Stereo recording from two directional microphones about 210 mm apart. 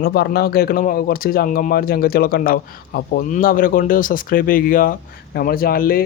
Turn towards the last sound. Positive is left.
turn(degrees=45)  # may be behind; listen again after turning